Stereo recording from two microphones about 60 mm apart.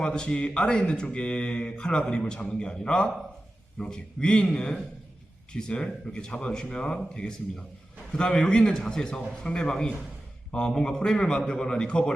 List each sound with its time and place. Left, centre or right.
0.0 s speech: centre